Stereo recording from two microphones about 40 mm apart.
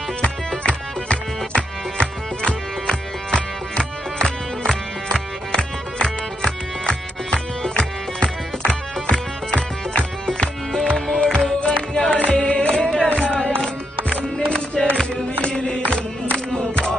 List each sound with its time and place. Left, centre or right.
0.7 s music: left
14.8 s music: left